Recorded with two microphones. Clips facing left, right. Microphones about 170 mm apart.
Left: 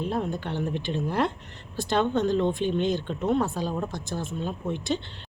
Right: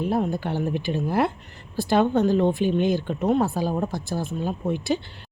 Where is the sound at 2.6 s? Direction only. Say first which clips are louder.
Right 4 dB; 5° right (ahead or behind).